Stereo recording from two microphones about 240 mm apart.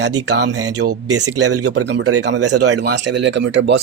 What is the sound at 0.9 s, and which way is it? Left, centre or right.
Speech, right.